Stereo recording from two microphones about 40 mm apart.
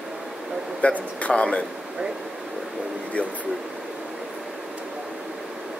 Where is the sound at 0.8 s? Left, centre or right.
Left.